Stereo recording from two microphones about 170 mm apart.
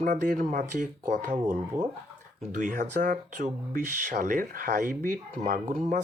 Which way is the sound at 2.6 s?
50° right (ahead or behind).